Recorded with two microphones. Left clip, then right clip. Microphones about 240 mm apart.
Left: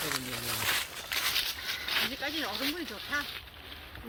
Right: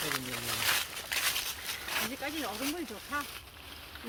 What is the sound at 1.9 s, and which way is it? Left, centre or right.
Speech, right.